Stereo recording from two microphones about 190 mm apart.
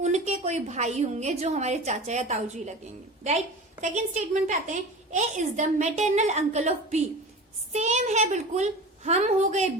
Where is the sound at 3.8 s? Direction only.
40° right (ahead or behind).